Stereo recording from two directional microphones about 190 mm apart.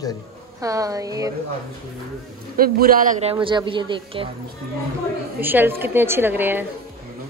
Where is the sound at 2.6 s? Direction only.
50° right (ahead or behind).